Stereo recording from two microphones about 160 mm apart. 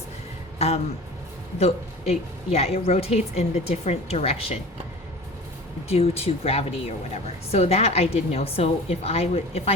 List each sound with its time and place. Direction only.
1.5 s speech: 40° left (ahead or behind)
5.9 s speech: 40° left (ahead or behind)